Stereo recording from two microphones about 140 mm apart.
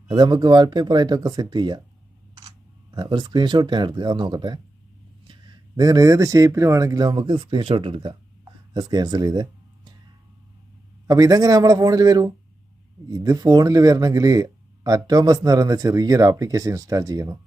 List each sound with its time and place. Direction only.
0.1 s speech: 30° right (ahead or behind)
2.9 s speech: 30° right (ahead or behind)
11.0 s speech: 25° right (ahead or behind)